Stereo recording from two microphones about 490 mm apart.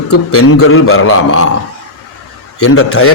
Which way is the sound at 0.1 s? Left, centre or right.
Left.